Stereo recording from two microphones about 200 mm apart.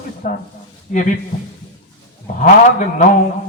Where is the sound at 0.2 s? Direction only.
40° left (ahead or behind).